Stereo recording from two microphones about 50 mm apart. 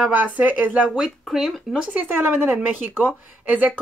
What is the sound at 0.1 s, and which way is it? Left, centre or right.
Speech, right.